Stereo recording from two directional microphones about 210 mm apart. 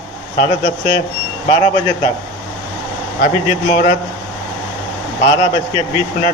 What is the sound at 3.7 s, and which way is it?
Speech, 30° left (ahead or behind).